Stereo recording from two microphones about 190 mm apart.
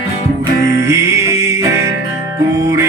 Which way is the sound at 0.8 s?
15° right (ahead or behind).